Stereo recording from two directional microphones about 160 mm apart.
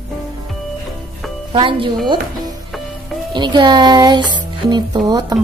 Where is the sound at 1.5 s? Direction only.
35° right (ahead or behind).